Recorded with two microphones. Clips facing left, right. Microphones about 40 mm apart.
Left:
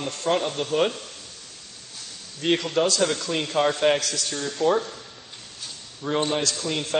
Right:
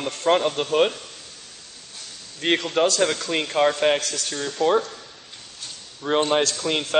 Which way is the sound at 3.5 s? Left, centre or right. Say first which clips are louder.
Right 1 dB; centre.